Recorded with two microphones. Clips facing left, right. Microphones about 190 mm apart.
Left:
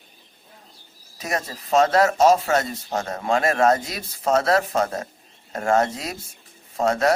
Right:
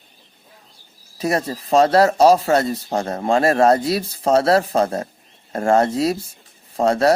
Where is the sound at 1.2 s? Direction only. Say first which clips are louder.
Right 7 dB; 35° right (ahead or behind).